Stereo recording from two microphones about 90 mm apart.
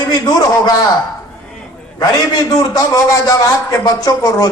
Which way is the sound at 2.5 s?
45° left (ahead or behind).